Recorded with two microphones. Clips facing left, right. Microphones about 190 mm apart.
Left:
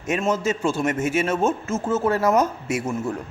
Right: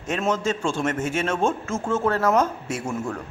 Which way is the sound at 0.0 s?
10° left (ahead or behind).